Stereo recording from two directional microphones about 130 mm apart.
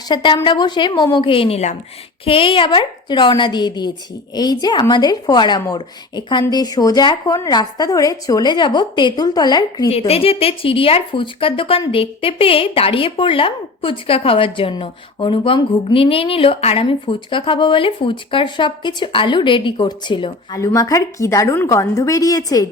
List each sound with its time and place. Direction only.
0.1 s speech: 40° left (ahead or behind)
10.1 s speech: 50° left (ahead or behind)
20.6 s a woman's voice: 25° left (ahead or behind)